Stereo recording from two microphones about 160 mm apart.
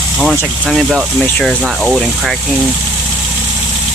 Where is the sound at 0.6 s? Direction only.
5° right (ahead or behind).